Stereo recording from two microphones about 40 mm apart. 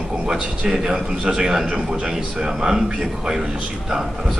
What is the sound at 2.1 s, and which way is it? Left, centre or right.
Speech, centre.